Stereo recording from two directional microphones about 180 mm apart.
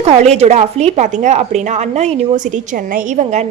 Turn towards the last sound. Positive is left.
turn(degrees=-40)  # may be behind; listen again after turning